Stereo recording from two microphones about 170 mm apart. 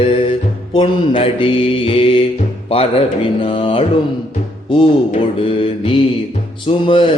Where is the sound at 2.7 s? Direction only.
30° left (ahead or behind).